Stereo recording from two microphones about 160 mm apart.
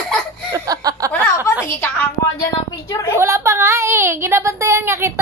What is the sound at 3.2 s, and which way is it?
A woman's voice, 15° right (ahead or behind).